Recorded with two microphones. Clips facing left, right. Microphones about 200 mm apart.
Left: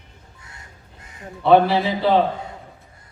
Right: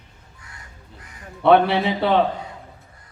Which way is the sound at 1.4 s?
60° right (ahead or behind).